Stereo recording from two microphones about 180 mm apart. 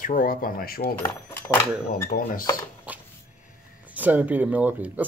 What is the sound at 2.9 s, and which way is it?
Cupboard open or close, 10° right (ahead or behind).